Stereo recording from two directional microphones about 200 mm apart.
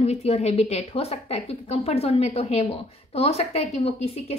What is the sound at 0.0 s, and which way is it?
A woman's voice, 30° left (ahead or behind).